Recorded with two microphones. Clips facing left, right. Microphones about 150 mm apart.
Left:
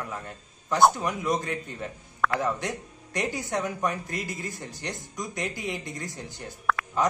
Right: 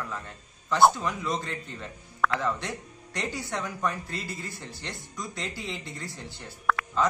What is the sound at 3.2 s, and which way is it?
Speech, 15° left (ahead or behind).